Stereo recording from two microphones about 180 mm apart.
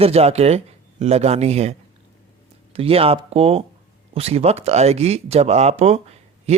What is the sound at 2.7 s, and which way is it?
Speech, 30° right (ahead or behind).